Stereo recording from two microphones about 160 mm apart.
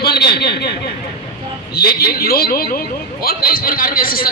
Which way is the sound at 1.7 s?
75° left (ahead or behind).